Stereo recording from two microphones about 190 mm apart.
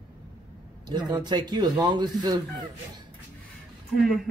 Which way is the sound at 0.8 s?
20° right (ahead or behind).